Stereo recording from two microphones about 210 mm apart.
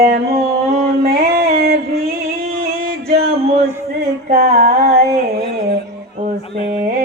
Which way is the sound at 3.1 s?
30° right (ahead or behind).